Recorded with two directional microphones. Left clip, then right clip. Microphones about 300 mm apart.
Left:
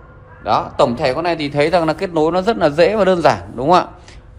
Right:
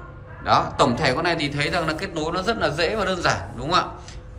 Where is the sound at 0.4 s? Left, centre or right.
Centre.